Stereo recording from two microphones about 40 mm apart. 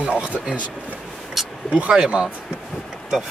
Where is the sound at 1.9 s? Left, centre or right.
Right.